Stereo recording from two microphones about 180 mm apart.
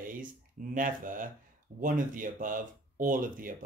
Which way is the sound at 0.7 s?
50° right (ahead or behind).